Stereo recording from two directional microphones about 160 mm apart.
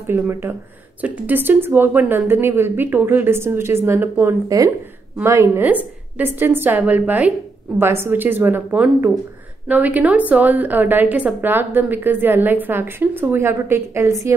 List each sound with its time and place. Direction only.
0.0 s a woman's voice: 15° right (ahead or behind)